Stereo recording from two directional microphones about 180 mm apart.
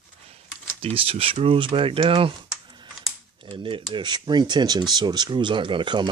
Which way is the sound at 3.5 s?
30° right (ahead or behind).